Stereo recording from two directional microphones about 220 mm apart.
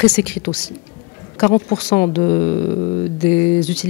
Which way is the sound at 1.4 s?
15° left (ahead or behind).